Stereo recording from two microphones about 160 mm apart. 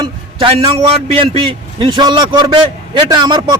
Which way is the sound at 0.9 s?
40° right (ahead or behind).